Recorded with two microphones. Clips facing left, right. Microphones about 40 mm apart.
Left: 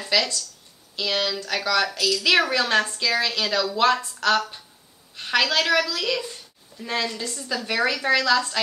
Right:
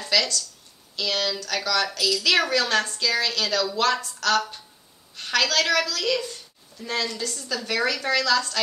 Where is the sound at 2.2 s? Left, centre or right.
Centre.